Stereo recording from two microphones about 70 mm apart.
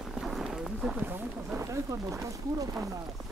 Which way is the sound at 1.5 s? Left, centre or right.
Right.